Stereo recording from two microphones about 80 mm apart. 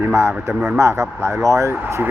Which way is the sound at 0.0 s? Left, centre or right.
Right.